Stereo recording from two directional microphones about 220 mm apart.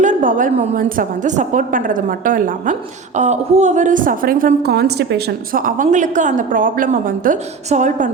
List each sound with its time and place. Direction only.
0.0 s a woman's voice: 35° right (ahead or behind)